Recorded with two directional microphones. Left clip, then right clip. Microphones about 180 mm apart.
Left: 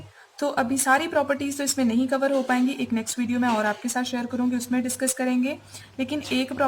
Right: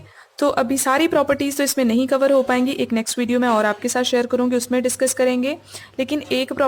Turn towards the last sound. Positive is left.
turn(degrees=-50)  # may be behind; listen again after turning